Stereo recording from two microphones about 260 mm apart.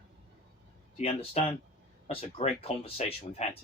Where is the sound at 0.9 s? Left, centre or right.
Left.